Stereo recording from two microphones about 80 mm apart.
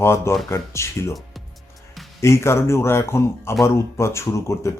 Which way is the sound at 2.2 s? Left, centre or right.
Left.